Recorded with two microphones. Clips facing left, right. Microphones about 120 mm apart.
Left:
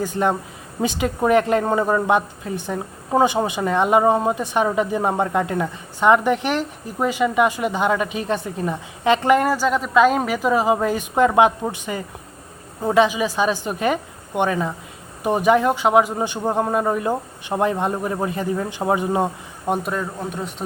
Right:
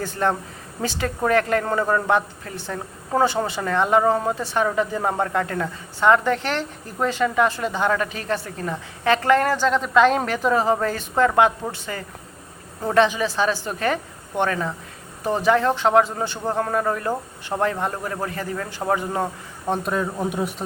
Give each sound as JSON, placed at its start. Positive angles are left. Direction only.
{"t": 0.0, "sound": "a woman's voice", "side_deg": 15}
{"t": 19.8, "sound": "a man's voice", "side_deg": 0}
{"t": 20.3, "sound": "a man's voice", "side_deg": -10}